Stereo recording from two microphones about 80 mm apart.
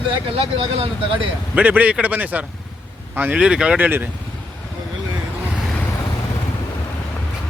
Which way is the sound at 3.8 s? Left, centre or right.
Right.